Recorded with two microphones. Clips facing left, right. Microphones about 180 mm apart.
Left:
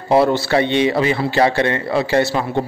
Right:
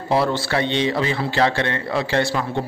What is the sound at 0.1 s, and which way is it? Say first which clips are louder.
A man's voice: left 6 dB; 15° left (ahead or behind).